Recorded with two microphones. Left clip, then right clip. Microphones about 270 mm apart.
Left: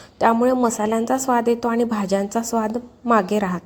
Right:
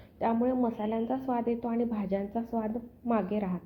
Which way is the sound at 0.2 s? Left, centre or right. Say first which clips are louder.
Left 12 dB; left.